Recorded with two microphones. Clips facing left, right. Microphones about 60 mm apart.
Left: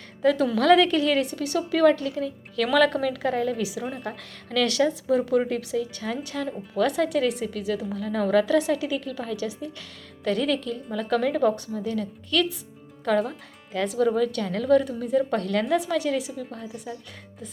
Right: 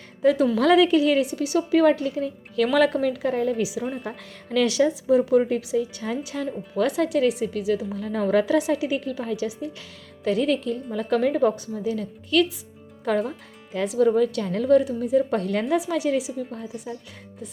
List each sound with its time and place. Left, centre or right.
0.2 s a woman's voice: centre
13.7 s a woman's voice: centre